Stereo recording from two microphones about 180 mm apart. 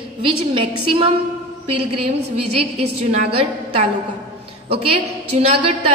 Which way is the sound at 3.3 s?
35° right (ahead or behind).